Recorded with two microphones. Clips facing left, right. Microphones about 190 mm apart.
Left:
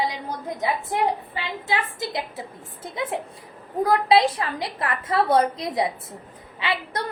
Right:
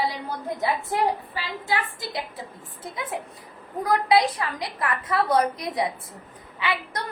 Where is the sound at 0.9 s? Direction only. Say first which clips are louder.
Even; 20° left (ahead or behind).